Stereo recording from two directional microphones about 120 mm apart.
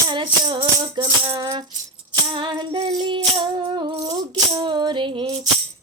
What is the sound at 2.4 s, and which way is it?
Speech, 45° right (ahead or behind).